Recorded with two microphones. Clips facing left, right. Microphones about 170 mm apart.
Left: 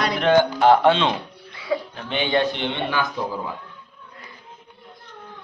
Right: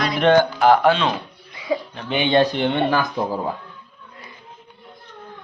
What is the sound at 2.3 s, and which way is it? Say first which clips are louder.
Speech: right 5 dB; 40° right (ahead or behind).